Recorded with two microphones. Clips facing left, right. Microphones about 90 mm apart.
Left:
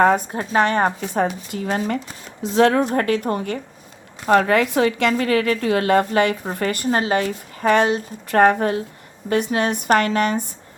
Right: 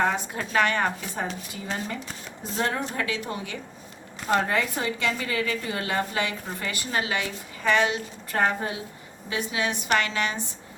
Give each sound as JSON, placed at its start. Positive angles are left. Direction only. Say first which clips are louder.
{"t": 0.3, "sound": "speech", "louder": "left 5 dB", "side_deg": 30}
{"t": 1.5, "sound": "a woman's voice", "louder": "left 9 dB", "side_deg": 60}
{"t": 2.4, "sound": "speech", "louder": "left 12 dB", "side_deg": 80}
{"t": 3.0, "sound": "a woman's voice", "louder": "left 9 dB", "side_deg": 50}
{"t": 4.3, "sound": "a woman's voice", "louder": "left 8 dB", "side_deg": 70}
{"t": 8.3, "sound": "a woman's voice", "louder": "left 10 dB", "side_deg": 60}